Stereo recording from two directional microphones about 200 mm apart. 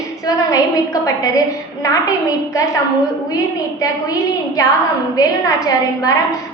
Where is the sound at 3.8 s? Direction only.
15° left (ahead or behind).